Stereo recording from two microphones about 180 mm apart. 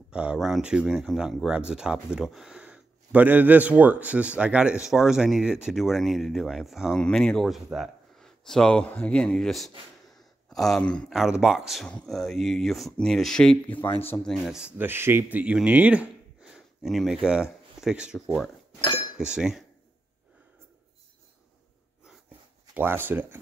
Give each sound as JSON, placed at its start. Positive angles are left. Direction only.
{"t": 0.1, "sound": "speech", "side_deg": -5}
{"t": 13.7, "sound": "speech", "side_deg": 30}
{"t": 14.0, "sound": "speech", "side_deg": 10}
{"t": 22.8, "sound": "speech", "side_deg": -10}